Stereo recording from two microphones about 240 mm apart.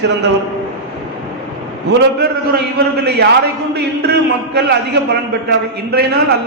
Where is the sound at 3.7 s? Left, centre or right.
Right.